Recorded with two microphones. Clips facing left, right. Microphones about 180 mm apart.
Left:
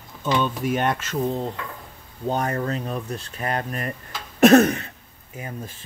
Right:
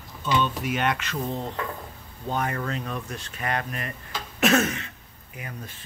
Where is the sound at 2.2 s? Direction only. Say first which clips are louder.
Left 4 dB; 40° left (ahead or behind).